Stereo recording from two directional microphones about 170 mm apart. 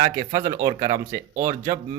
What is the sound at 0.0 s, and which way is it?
Speech, 20° right (ahead or behind).